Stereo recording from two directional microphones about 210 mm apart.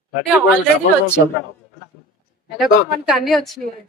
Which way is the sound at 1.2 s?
55° left (ahead or behind).